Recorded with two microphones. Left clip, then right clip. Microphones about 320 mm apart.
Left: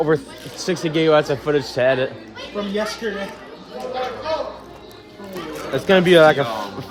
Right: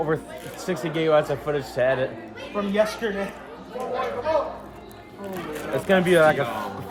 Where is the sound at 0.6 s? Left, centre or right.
Left.